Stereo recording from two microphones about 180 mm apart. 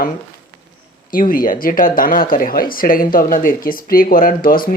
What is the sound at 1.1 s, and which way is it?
Speech, 50° left (ahead or behind).